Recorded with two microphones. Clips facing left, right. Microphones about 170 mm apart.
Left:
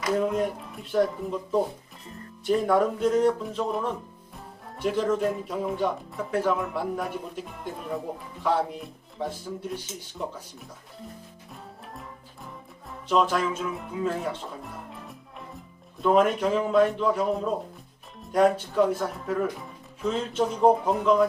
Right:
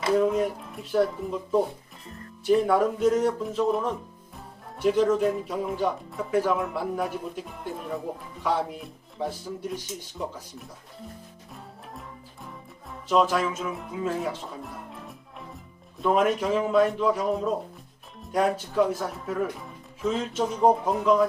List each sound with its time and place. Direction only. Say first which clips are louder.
0.3 s speech: right 1 dB; centre (ahead or behind)
12.9 s speech: right 1 dB; 5° right (ahead or behind)